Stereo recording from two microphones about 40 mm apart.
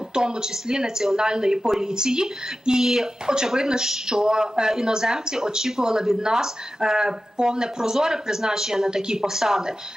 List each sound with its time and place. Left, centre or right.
0.1 s speech: centre